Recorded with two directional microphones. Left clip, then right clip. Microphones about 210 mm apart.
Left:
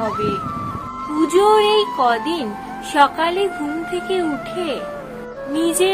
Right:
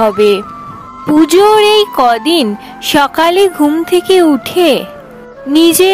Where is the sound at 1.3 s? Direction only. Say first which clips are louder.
Right 6 dB; 55° right (ahead or behind).